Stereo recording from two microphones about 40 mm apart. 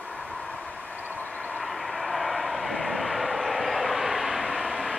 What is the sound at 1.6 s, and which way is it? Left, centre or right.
Vehicle, centre.